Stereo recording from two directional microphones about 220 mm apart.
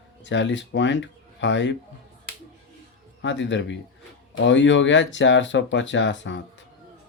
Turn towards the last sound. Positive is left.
turn(degrees=55)  # may be behind; listen again after turning